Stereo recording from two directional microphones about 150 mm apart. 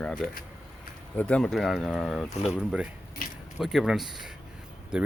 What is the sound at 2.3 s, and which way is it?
Speech, 40° left (ahead or behind).